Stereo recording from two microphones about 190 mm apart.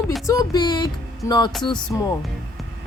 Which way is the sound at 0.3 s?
20° left (ahead or behind).